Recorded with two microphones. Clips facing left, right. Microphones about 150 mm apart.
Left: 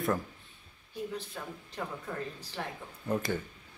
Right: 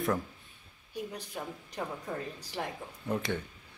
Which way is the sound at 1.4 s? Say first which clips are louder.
Right 2 dB; 15° right (ahead or behind).